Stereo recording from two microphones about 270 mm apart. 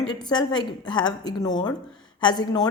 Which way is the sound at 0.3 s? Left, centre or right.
Centre.